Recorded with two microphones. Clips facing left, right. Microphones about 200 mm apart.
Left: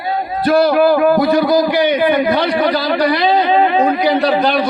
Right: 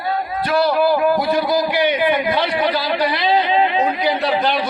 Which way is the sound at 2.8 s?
45° left (ahead or behind).